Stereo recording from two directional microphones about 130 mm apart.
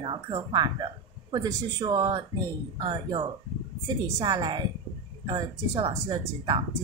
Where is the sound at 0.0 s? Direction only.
40° right (ahead or behind).